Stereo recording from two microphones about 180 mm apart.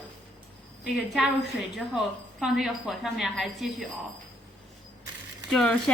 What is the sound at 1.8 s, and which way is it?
A woman's voice, centre (ahead or behind).